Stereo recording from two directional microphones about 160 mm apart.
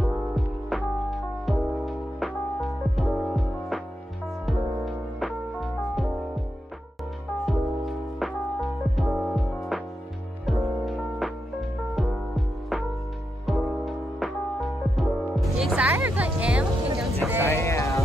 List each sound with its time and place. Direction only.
0.7 s music: centre (ahead or behind)
7.4 s music: centre (ahead or behind)
17.5 s a sound: 20° left (ahead or behind)